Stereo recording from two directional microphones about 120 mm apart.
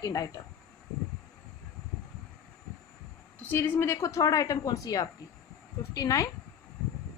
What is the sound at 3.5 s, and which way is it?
Speech, 20° left (ahead or behind).